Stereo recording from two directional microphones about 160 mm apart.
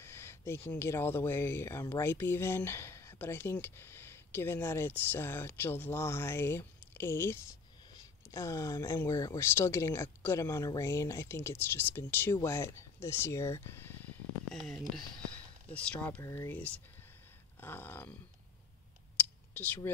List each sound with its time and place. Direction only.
0.0 s speech: 15° left (ahead or behind)
14.5 s speech: 5° left (ahead or behind)
19.5 s speech: 10° left (ahead or behind)